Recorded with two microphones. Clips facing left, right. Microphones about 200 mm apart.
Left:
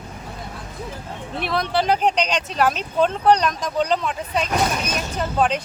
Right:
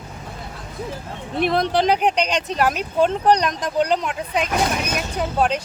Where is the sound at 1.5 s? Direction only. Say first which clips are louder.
Right 2 dB; 20° right (ahead or behind).